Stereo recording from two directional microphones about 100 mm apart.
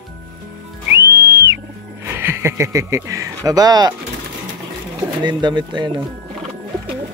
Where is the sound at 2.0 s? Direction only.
25° right (ahead or behind); by 3.9 s 40° right (ahead or behind).